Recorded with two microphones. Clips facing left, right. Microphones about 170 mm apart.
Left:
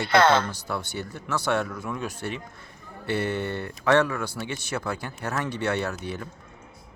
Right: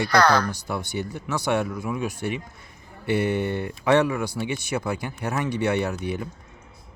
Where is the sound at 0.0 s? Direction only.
25° left (ahead or behind).